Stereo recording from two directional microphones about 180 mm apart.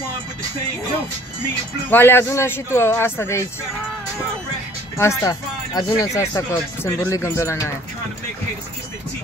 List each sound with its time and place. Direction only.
1.9 s speech: 10° left (ahead or behind)
4.9 s speech: 15° left (ahead or behind)